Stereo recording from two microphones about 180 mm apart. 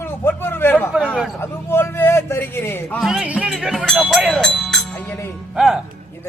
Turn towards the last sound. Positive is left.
turn(degrees=0)  # may be behind; listen again after turning